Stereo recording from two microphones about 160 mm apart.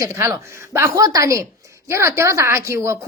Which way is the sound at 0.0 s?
15° right (ahead or behind).